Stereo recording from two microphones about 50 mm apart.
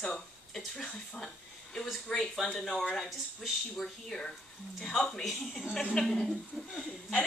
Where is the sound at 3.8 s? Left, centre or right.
Centre.